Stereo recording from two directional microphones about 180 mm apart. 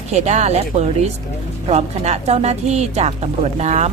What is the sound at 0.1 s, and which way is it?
Speech, 40° right (ahead or behind).